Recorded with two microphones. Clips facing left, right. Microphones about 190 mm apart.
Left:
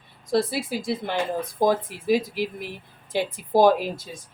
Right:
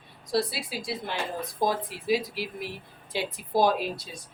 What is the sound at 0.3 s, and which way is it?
Speech, 50° left (ahead or behind).